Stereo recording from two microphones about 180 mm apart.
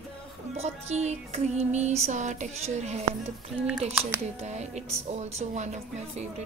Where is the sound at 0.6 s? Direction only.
35° right (ahead or behind).